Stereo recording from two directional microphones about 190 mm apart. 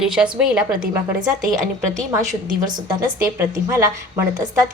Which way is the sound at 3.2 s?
15° right (ahead or behind).